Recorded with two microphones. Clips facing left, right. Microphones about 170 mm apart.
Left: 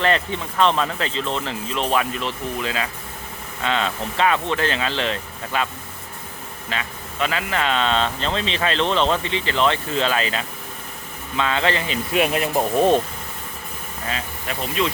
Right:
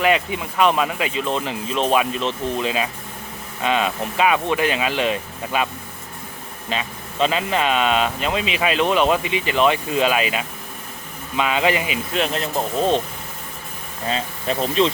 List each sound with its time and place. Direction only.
0.0 s speech: 10° right (ahead or behind)
6.7 s speech: 20° right (ahead or behind)
12.1 s speech: 10° left (ahead or behind)
14.1 s speech: 30° right (ahead or behind)